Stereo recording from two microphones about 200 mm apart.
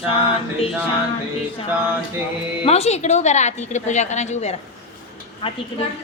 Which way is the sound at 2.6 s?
30° left (ahead or behind).